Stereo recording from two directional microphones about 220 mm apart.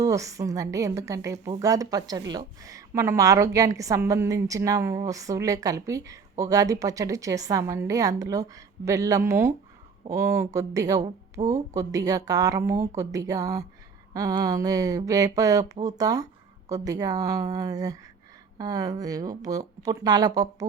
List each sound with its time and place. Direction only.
0.0 s a woman's voice: 15° right (ahead or behind)